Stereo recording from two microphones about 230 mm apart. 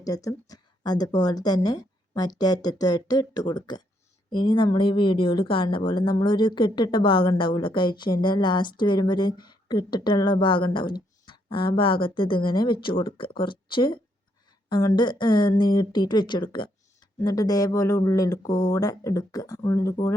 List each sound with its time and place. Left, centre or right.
0.0 s a woman's voice: centre